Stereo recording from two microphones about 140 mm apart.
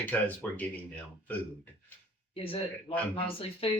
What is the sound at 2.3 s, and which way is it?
Speech, 40° left (ahead or behind).